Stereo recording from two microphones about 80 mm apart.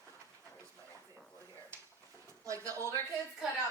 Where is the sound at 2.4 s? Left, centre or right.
Right.